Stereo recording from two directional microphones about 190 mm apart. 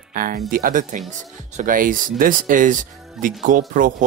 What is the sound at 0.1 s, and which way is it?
Speech, 50° right (ahead or behind).